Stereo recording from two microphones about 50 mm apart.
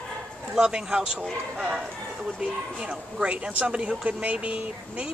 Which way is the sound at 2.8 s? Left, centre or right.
Centre.